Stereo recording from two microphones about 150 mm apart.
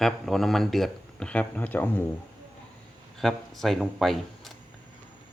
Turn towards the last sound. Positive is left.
turn(degrees=0)  # may be behind; listen again after turning